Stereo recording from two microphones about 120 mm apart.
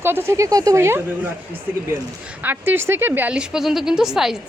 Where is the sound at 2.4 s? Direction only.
15° right (ahead or behind).